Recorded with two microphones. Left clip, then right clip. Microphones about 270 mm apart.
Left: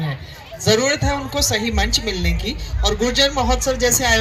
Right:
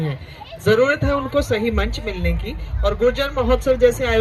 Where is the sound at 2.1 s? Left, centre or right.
Right.